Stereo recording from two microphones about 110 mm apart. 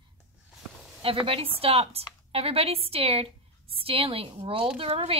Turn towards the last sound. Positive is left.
turn(degrees=-60)  # may be behind; listen again after turning